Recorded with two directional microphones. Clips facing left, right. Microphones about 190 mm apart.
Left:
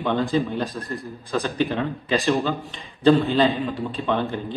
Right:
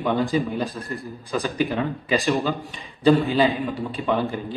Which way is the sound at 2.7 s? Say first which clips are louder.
Left 1 dB; 15° right (ahead or behind).